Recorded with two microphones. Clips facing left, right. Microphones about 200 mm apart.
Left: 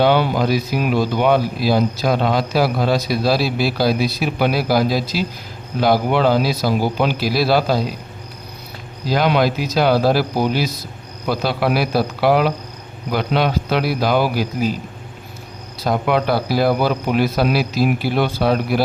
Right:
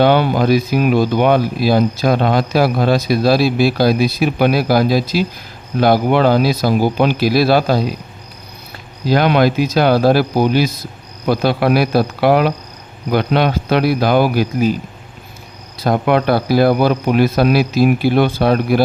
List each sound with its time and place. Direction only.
0.0 s speech: 55° right (ahead or behind)
9.0 s a man's voice: 55° right (ahead or behind)
15.8 s speech: 55° right (ahead or behind)